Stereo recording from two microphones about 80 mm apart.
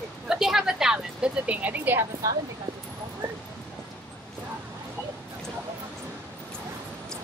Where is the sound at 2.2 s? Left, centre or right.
Right.